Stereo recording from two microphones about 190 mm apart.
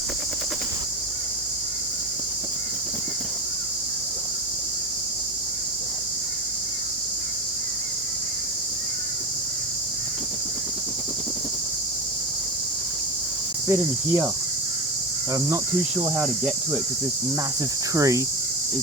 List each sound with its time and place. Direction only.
13.7 s cricket: 15° right (ahead or behind)
15.3 s cricket: 15° right (ahead or behind)
17.9 s cricket: 15° right (ahead or behind)